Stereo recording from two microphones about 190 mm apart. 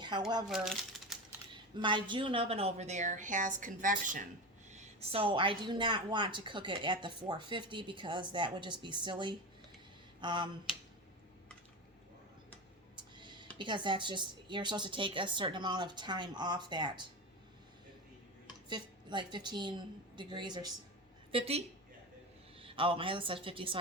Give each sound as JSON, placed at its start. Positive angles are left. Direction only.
{"t": 0.4, "sound": "speech", "side_deg": 0}
{"t": 1.5, "sound": "a woman's voice", "side_deg": -25}
{"t": 4.7, "sound": "speech", "side_deg": -30}
{"t": 13.1, "sound": "a sound", "side_deg": -25}
{"t": 13.6, "sound": "speech", "side_deg": -25}
{"t": 18.7, "sound": "a woman's voice", "side_deg": -25}
{"t": 22.6, "sound": "speech", "side_deg": -30}